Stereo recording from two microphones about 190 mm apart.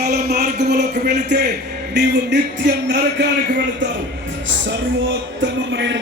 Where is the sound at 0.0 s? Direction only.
60° right (ahead or behind).